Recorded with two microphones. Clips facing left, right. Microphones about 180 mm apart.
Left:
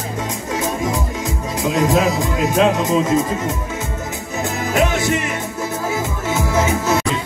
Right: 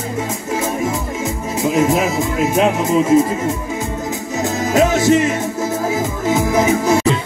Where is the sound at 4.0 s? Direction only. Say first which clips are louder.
Right 4 dB; 20° right (ahead or behind).